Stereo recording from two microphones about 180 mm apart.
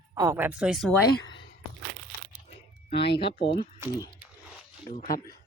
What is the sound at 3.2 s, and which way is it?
Speech, 30° left (ahead or behind).